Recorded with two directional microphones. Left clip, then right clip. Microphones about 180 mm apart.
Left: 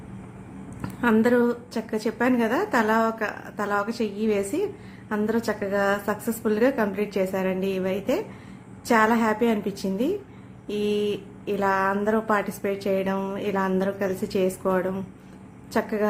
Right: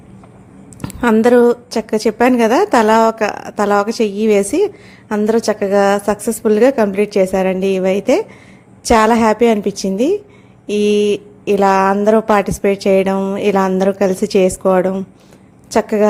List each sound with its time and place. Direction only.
0.8 s speech: 35° right (ahead or behind)